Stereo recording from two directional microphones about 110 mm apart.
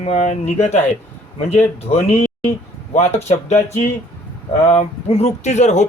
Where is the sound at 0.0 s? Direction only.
90° left.